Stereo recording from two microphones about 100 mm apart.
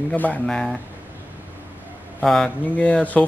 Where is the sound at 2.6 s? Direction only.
15° left (ahead or behind).